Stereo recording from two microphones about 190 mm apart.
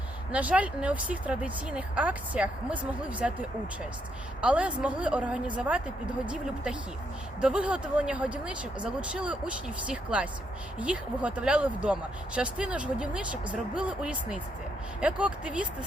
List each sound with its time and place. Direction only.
0.3 s speech: 5° right (ahead or behind)
4.4 s speech: 5° right (ahead or behind)
7.4 s speech: 5° right (ahead or behind)